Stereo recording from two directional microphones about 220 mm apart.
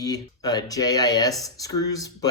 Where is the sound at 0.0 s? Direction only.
15° left (ahead or behind).